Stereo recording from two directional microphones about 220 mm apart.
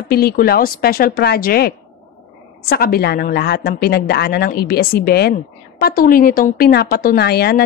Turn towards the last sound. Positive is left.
turn(degrees=45)  # may be behind; listen again after turning